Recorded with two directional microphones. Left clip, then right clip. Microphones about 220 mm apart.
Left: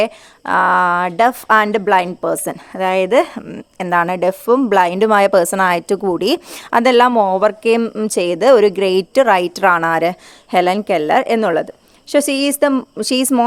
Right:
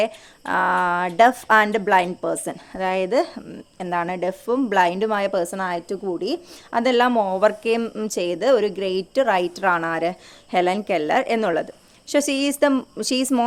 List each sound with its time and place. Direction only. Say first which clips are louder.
0.0 s speech: left 5 dB; 25° left (ahead or behind)